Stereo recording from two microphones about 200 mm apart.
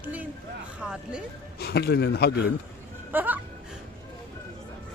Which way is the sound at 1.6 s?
55° left (ahead or behind).